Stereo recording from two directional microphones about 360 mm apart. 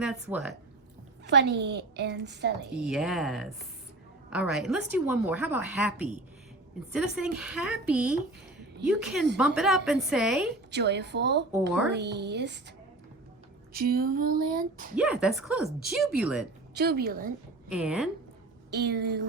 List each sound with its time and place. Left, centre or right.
0.0 s a woman's voice: centre
1.3 s a woman's voice: right
2.8 s a woman's voice: centre
10.7 s a woman's voice: right
13.7 s a woman's voice: right
14.9 s a woman's voice: centre
16.7 s a woman's voice: right
17.7 s a woman's voice: centre
18.7 s a woman's voice: right